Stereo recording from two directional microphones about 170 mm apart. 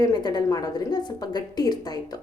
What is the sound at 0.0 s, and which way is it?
A woman's voice, 25° left (ahead or behind).